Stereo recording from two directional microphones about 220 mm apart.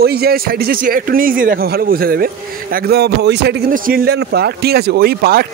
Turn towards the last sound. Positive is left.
turn(degrees=-45)  # may be behind; listen again after turning